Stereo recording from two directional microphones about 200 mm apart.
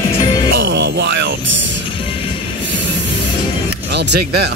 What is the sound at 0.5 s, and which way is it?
Music, 65° right (ahead or behind).